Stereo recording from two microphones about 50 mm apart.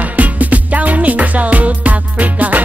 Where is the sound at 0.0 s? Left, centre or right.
Right.